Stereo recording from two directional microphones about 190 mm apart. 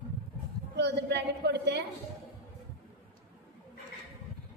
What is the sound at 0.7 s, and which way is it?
A woman's voice, 65° right (ahead or behind).